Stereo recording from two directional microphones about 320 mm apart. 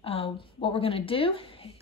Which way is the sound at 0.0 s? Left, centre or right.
Centre.